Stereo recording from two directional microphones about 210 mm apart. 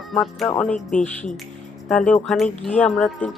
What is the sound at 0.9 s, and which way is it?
Speech, 35° left (ahead or behind).